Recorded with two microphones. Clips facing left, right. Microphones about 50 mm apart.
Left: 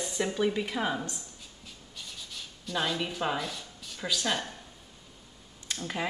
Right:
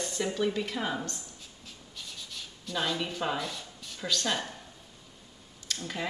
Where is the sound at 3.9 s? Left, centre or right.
Centre.